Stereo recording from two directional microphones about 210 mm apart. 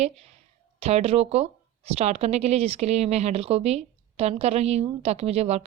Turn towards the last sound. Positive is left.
turn(degrees=-30)  # may be behind; listen again after turning